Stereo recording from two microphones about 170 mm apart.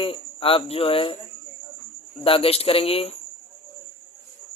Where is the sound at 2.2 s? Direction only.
35° left (ahead or behind).